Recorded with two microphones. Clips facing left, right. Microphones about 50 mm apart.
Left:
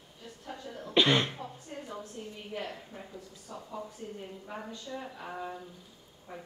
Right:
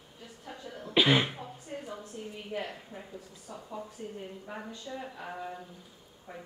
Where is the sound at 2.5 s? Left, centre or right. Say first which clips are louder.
Right 2 dB; centre.